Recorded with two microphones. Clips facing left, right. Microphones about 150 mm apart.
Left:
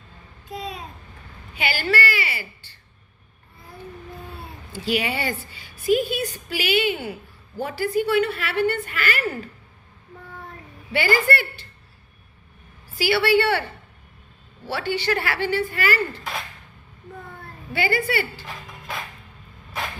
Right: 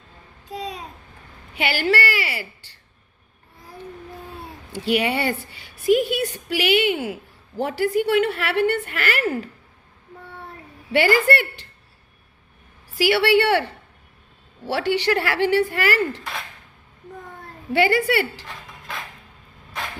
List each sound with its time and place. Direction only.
0.5 s babbling: 35° right (ahead or behind)
1.5 s a woman's voice: 70° right (ahead or behind)
4.7 s a woman's voice: 60° right (ahead or behind); by 7.2 s 90° right
7.6 s a woman's voice: 70° right (ahead or behind)
10.9 s a woman's voice: 75° right (ahead or behind)
13.0 s a woman's voice: 75° right (ahead or behind)
14.7 s a woman's voice: 80° right
17.7 s a woman's voice: 85° right
18.4 s dog: 5° left (ahead or behind)